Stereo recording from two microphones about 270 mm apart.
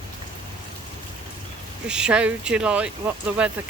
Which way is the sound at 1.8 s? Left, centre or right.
Centre.